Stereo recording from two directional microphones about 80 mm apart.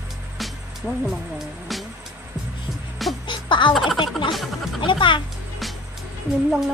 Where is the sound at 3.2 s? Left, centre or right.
Left.